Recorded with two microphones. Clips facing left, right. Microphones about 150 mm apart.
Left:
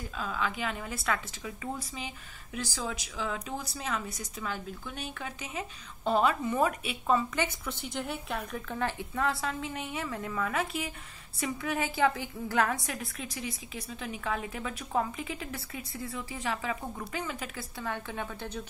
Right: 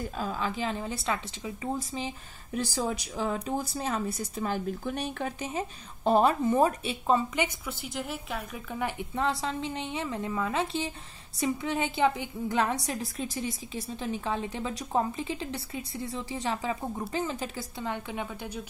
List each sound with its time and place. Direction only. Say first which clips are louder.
0.1 s a woman's voice: right 2 dB; 40° right (ahead or behind)
7.3 s a woman's voice: right 2 dB; 10° right (ahead or behind)
13.2 s a woman's voice: right 5 dB; 35° right (ahead or behind); by 18.6 s 15° right (ahead or behind)